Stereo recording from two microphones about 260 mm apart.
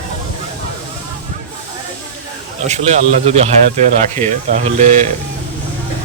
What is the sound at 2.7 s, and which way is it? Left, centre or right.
Speech, right.